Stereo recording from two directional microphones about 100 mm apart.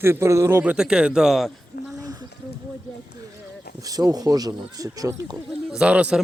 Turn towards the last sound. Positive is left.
turn(degrees=-10)  # may be behind; listen again after turning